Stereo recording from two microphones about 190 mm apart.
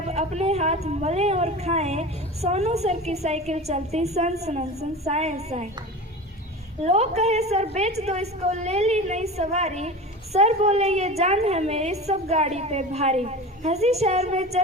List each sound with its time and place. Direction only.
0.1 s speech: 35° right (ahead or behind)
6.8 s speech: 35° right (ahead or behind)